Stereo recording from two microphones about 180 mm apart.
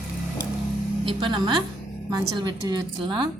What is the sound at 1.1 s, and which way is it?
A woman's voice, 25° right (ahead or behind).